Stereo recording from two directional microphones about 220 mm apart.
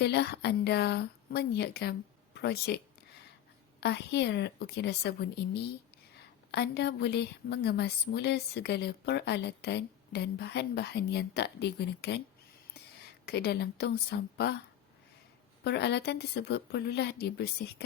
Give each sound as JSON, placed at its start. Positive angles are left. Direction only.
{"t": 0.0, "sound": "a woman's voice", "side_deg": 50}
{"t": 6.5, "sound": "a woman's voice", "side_deg": 50}
{"t": 13.2, "sound": "a woman's voice", "side_deg": 45}
{"t": 15.6, "sound": "a woman's voice", "side_deg": 50}